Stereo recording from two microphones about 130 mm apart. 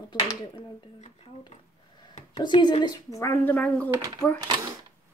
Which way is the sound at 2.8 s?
25° left (ahead or behind).